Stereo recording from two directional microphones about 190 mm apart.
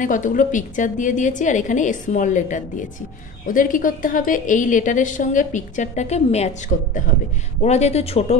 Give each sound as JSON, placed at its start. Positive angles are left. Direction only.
{"t": 0.0, "sound": "a woman's voice", "side_deg": 45}